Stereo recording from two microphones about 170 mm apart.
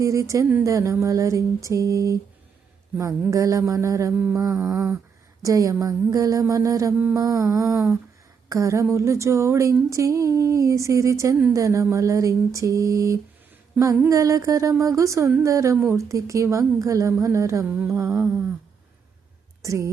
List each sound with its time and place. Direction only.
0.0 s speech: 20° right (ahead or behind)
5.4 s mantra: 20° right (ahead or behind)
8.4 s speech: 20° right (ahead or behind)
19.6 s speech: 15° right (ahead or behind)